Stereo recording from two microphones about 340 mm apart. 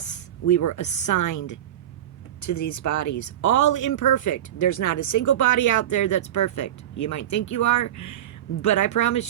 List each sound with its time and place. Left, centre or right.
0.0 s a woman's voice: left